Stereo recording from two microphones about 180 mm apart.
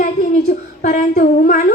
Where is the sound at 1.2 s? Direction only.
40° left (ahead or behind).